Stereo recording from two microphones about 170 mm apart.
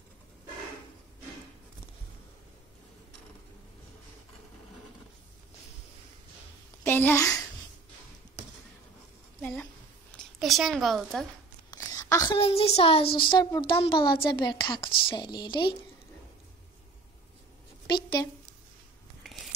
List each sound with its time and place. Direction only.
6.8 s a child's voice: 10° left (ahead or behind)
9.4 s a woman's voice: 10° left (ahead or behind)
11.7 s a sound: 20° left (ahead or behind)
12.4 s a child's voice: 35° left (ahead or behind)
17.8 s a sound: 25° left (ahead or behind)
19.2 s scissors: centre (ahead or behind)